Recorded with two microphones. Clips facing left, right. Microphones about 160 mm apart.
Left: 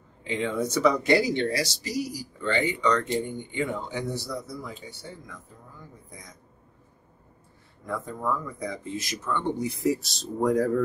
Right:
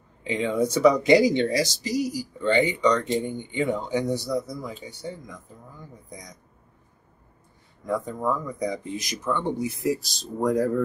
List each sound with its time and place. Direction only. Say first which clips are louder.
0.2 s speech: right 4 dB; 15° right (ahead or behind)
6.0 s speech: right 5 dB; 20° right (ahead or behind)
7.8 s speech: right 4 dB; 20° right (ahead or behind); by 10.8 s centre (ahead or behind)